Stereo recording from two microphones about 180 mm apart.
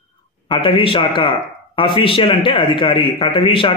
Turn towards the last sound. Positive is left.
turn(degrees=30)  # may be behind; listen again after turning